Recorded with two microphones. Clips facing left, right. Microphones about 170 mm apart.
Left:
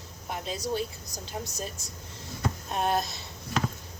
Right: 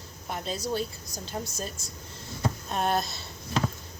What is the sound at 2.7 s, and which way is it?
Speech, 15° left (ahead or behind).